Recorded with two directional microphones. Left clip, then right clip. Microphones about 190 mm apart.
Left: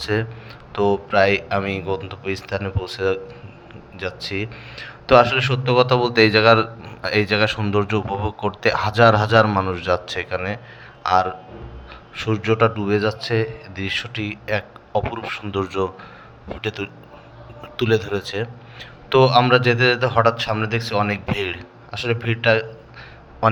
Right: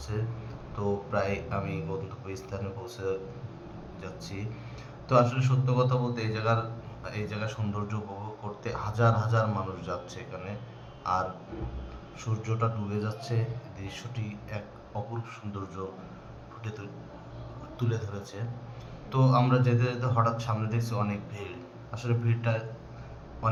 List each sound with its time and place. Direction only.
0.1 s a man's voice: 40° left (ahead or behind)